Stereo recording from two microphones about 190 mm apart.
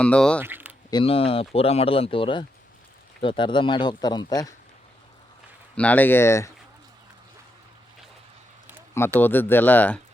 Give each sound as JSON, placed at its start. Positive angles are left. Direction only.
{"t": 0.0, "sound": "speech", "side_deg": 5}
{"t": 0.3, "sound": "speech", "side_deg": -10}
{"t": 0.9, "sound": "speech", "side_deg": 25}
{"t": 5.7, "sound": "speech", "side_deg": 5}
{"t": 9.2, "sound": "speech", "side_deg": 10}